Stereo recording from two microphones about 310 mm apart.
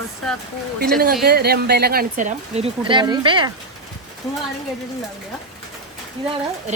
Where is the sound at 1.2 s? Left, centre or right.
Right; by 3.5 s centre.